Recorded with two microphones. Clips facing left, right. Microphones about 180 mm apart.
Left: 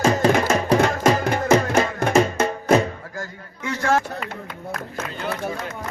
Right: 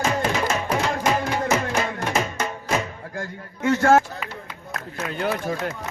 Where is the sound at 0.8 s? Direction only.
55° left (ahead or behind).